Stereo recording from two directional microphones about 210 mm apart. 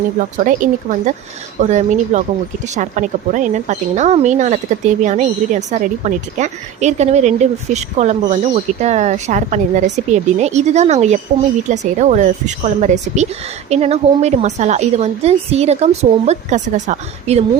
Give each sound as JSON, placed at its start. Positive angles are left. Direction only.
{"t": 0.2, "sound": "a woman's voice", "side_deg": -40}